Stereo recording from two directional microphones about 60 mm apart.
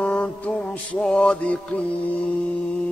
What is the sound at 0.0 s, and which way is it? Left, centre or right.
Music, left.